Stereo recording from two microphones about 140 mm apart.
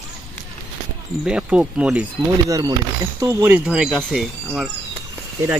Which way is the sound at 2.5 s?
25° right (ahead or behind).